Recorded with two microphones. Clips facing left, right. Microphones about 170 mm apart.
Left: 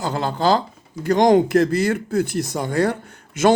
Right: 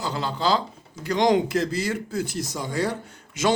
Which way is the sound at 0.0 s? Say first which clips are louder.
Left 5 dB; 50° left (ahead or behind).